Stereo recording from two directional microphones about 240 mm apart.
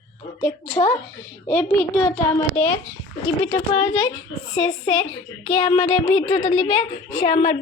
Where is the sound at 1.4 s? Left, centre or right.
Centre.